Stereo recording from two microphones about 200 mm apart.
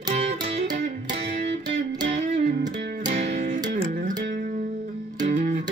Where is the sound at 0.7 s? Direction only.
55° right (ahead or behind).